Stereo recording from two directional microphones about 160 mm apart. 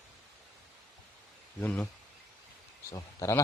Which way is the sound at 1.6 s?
5° left (ahead or behind).